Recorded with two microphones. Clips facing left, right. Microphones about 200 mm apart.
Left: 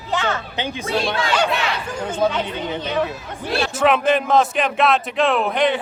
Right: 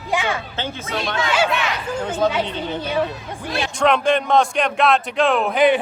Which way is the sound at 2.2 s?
10° left (ahead or behind).